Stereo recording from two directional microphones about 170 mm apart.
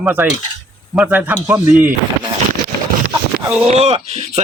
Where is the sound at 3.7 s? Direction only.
40° right (ahead or behind).